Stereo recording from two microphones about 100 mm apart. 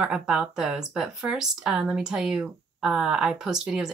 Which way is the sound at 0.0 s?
10° right (ahead or behind).